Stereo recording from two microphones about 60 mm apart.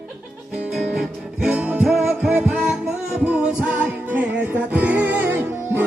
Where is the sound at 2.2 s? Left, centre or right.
Right.